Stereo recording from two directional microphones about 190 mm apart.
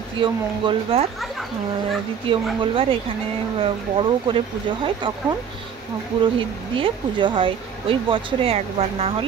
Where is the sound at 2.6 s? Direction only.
30° right (ahead or behind).